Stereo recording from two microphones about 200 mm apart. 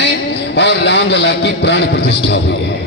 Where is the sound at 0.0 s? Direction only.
60° left (ahead or behind).